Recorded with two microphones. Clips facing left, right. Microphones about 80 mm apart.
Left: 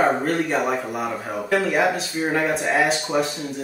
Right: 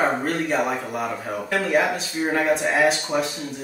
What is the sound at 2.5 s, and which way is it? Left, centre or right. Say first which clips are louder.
Speech: even; centre.